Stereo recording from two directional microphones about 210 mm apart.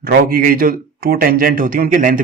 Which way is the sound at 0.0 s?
45° right (ahead or behind).